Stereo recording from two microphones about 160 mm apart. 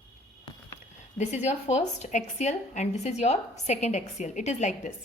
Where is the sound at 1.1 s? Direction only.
45° left (ahead or behind).